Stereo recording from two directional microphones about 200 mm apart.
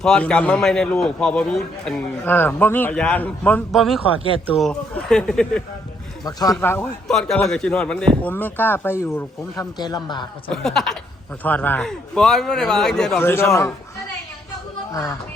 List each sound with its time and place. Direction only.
0.0 s a man's voice: 5° left (ahead or behind)
6.2 s a man's voice: 20° left (ahead or behind)
10.5 s a man's voice: centre (ahead or behind)
14.9 s a man's voice: 15° left (ahead or behind)